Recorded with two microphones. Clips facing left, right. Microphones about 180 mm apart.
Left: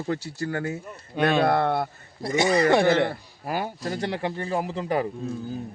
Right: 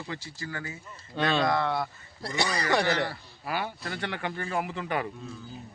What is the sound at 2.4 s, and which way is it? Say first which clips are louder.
Speech: left 8 dB; 25° left (ahead or behind).